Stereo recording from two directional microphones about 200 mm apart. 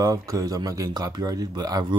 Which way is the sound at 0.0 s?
15° right (ahead or behind).